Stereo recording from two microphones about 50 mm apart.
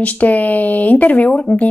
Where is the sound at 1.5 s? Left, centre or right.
Left.